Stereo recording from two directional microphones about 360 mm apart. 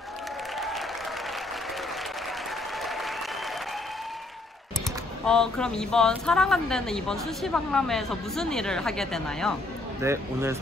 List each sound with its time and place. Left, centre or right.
2.8 s applause: centre
5.2 s a woman's voice: centre